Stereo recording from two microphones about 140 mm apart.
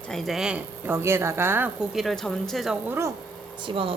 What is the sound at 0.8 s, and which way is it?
Speech, 15° right (ahead or behind).